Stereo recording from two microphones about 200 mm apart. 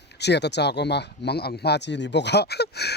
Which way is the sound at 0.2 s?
55° left (ahead or behind).